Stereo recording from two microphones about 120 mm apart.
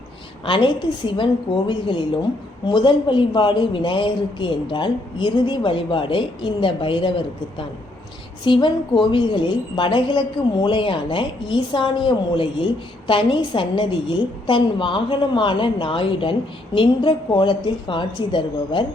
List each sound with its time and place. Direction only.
0.4 s a woman's voice: 45° left (ahead or behind)
8.4 s a woman's voice: 40° left (ahead or behind)